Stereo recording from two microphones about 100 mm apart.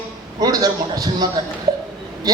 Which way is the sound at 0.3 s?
40° right (ahead or behind).